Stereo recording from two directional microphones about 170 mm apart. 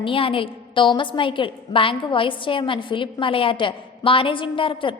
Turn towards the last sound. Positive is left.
turn(degrees=30)  # may be behind; listen again after turning